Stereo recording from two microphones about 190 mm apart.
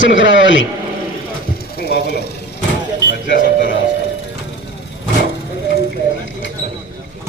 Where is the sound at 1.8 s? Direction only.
55° left (ahead or behind).